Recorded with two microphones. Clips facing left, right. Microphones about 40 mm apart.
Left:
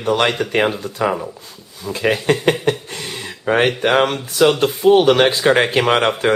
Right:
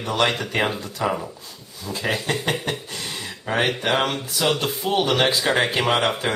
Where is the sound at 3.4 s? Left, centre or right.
Left.